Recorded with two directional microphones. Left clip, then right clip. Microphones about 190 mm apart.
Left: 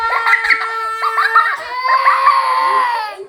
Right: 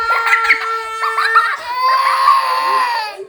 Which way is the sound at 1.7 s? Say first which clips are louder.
Left 1 dB; 55° right (ahead or behind).